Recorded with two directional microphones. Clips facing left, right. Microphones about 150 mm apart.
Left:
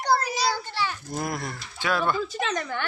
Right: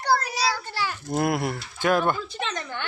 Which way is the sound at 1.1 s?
60° right (ahead or behind).